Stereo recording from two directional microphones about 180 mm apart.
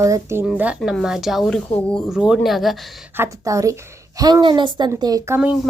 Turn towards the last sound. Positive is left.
turn(degrees=-10)  # may be behind; listen again after turning